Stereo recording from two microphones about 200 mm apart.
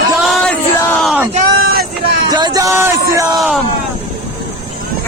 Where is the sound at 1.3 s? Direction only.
50° right (ahead or behind).